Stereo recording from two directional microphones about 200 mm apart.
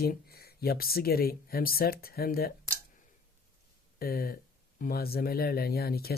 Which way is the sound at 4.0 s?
45° left (ahead or behind).